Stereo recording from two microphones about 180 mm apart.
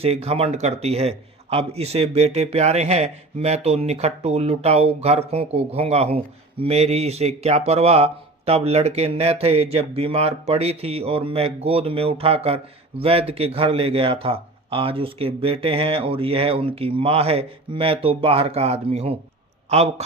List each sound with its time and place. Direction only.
0.0 s speech: 35° right (ahead or behind)